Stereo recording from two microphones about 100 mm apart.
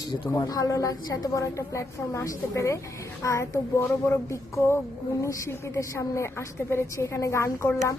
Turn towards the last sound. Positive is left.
turn(degrees=25)  # may be behind; listen again after turning